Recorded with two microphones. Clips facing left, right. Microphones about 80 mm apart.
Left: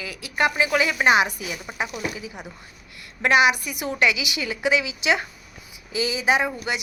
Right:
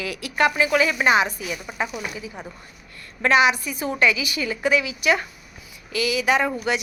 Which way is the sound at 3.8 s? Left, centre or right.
Right.